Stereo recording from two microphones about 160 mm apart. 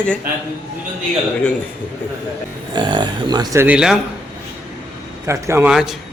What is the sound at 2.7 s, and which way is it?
Speech, 30° right (ahead or behind).